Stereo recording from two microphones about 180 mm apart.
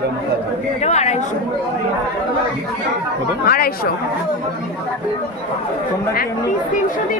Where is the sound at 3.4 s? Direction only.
55° left (ahead or behind).